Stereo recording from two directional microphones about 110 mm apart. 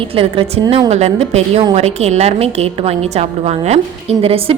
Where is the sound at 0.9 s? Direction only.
80° right; by 4.6 s 60° right (ahead or behind).